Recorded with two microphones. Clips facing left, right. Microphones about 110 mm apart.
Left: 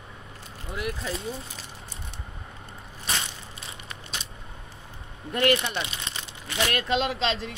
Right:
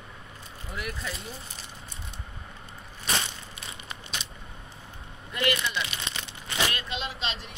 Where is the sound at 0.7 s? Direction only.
25° left (ahead or behind).